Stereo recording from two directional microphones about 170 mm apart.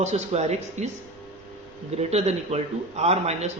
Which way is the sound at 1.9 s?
40° right (ahead or behind).